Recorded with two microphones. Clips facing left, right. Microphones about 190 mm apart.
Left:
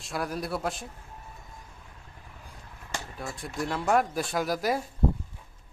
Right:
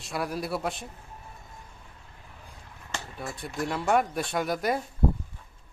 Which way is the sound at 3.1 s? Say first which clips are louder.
Right 1 dB; centre (ahead or behind).